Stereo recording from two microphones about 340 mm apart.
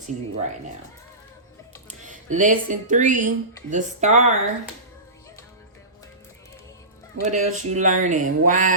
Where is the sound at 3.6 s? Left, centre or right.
Right.